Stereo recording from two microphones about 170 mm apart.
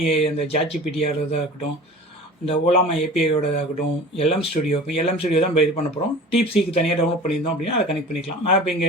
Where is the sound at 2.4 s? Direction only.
35° left (ahead or behind).